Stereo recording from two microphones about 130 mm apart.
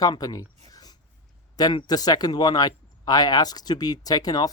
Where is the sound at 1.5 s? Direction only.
30° left (ahead or behind).